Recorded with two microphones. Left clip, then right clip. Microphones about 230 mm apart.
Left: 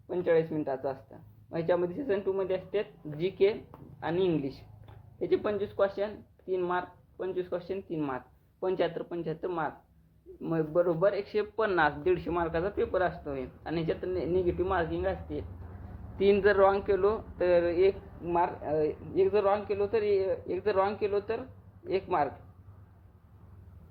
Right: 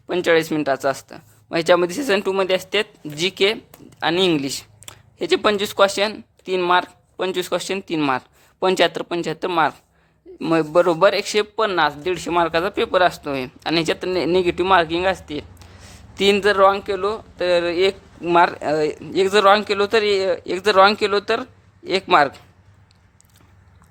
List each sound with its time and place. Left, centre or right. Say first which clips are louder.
0.1 s a man's voice: right 10 dB; right